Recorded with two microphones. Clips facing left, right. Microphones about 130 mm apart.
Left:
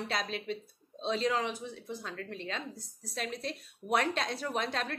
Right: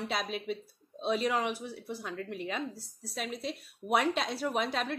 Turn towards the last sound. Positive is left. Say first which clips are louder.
# right 2 dB
turn(degrees=-5)  # may be behind; listen again after turning